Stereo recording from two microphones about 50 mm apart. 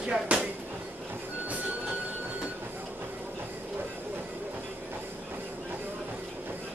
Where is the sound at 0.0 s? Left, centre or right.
Right.